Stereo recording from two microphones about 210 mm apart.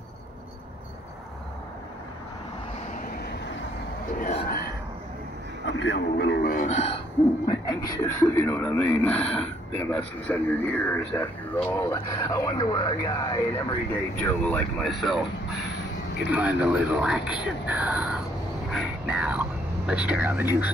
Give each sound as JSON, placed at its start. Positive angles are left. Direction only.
{"t": 4.2, "sound": "a sound", "side_deg": 30}
{"t": 5.7, "sound": "a man's voice", "side_deg": 60}
{"t": 7.4, "sound": "a man's voice", "side_deg": 20}
{"t": 14.1, "sound": "speech", "side_deg": 5}
{"t": 16.3, "sound": "speech", "side_deg": -5}
{"t": 18.7, "sound": "vehicle", "side_deg": -5}
{"t": 19.9, "sound": "speech", "side_deg": -5}